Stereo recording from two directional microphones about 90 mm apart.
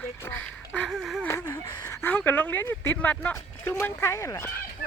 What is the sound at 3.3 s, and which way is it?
Speech, 35° left (ahead or behind).